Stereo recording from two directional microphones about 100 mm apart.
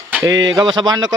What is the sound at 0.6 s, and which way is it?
Speech, 45° right (ahead or behind).